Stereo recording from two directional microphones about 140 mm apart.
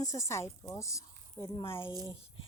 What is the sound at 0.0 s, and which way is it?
A woman's voice, 25° left (ahead or behind).